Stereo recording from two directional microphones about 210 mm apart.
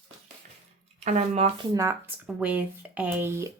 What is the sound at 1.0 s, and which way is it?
Speech, 30° right (ahead or behind).